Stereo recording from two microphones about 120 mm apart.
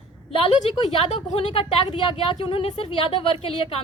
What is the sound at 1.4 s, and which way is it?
Speech, 50° left (ahead or behind).